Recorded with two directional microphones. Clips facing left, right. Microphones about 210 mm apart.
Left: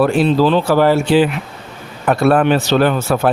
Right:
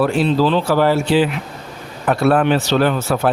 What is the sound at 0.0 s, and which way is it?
Speech, 50° left (ahead or behind).